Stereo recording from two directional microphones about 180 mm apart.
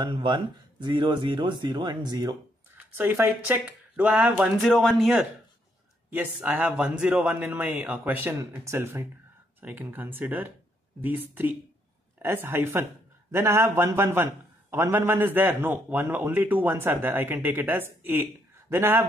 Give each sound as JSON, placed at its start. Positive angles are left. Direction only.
{"t": 0.0, "sound": "speech", "side_deg": -25}
{"t": 3.0, "sound": "a man's voice", "side_deg": -10}